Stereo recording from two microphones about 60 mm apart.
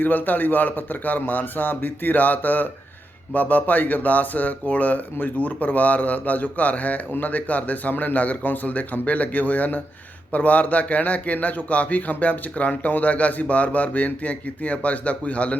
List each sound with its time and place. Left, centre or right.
0.0 s a man's voice: left